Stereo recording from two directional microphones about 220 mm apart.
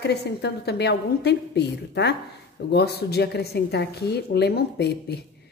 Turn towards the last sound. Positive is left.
turn(degrees=50)  # may be behind; listen again after turning